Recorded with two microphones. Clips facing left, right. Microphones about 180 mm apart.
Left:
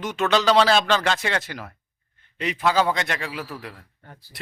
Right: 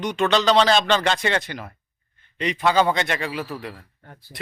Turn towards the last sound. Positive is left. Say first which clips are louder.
# right 3 dB
turn(degrees=0)  # may be behind; listen again after turning